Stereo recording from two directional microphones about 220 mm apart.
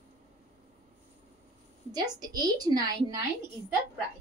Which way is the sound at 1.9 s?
15° right (ahead or behind).